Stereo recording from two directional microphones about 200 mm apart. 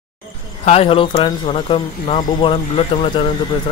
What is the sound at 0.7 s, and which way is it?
Speech, 30° left (ahead or behind).